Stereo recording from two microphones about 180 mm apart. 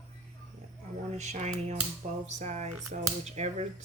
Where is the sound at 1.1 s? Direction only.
40° right (ahead or behind).